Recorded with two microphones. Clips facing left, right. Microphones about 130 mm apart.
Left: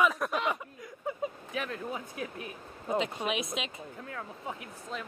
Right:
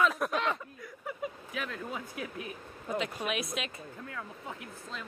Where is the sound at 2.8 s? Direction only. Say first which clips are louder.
Left 3 dB; 25° left (ahead or behind).